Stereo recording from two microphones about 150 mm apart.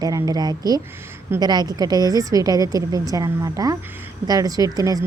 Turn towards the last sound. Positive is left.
turn(degrees=-25)  # may be behind; listen again after turning